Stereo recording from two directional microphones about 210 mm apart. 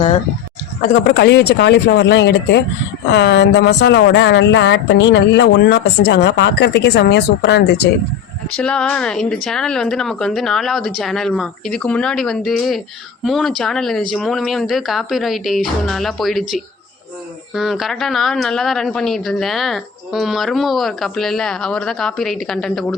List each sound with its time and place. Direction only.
0.8 s speech: 50° left (ahead or behind)
8.4 s a woman's voice: 5° left (ahead or behind)